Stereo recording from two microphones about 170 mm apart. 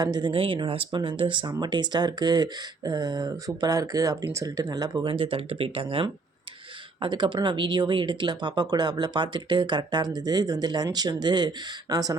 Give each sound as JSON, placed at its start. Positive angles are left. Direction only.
{"t": 0.0, "sound": "speech", "side_deg": -25}